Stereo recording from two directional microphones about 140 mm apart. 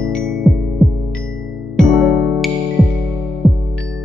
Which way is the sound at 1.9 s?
20° right (ahead or behind).